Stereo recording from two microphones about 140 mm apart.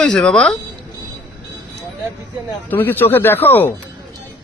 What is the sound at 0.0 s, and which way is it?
Speech, 5° left (ahead or behind).